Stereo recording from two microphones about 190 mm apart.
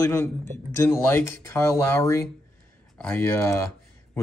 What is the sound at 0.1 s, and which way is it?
Speech, 10° left (ahead or behind).